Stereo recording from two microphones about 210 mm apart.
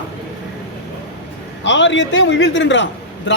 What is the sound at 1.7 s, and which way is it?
A man's voice, 60° left (ahead or behind).